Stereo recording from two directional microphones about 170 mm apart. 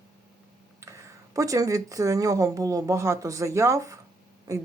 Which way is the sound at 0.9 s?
20° right (ahead or behind).